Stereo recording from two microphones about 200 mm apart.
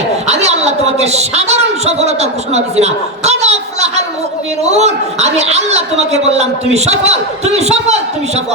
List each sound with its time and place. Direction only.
0.3 s a woman's voice: 35° right (ahead or behind)